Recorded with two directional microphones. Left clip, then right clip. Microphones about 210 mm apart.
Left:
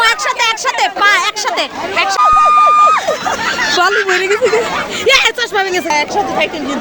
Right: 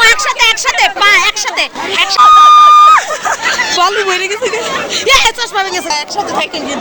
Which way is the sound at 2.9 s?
Centre (ahead or behind).